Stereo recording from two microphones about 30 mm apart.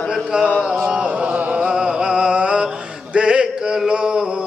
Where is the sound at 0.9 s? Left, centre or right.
Right.